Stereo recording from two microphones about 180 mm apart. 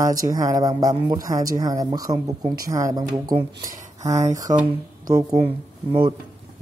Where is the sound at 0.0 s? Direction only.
20° right (ahead or behind).